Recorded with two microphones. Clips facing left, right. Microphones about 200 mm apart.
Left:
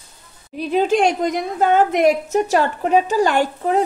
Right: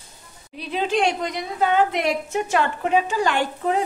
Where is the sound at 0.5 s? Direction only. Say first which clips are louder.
Left 6 dB; 45° left (ahead or behind).